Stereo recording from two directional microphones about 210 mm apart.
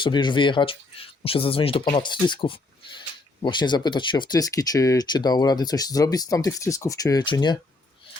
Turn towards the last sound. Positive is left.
turn(degrees=20)  # may be behind; listen again after turning